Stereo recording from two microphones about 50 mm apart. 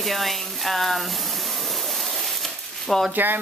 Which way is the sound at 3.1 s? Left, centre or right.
Right.